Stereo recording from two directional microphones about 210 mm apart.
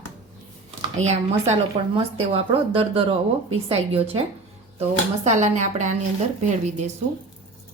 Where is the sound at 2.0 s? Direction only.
25° right (ahead or behind).